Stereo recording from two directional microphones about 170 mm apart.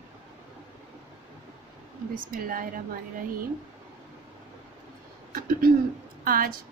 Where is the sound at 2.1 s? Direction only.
55° right (ahead or behind).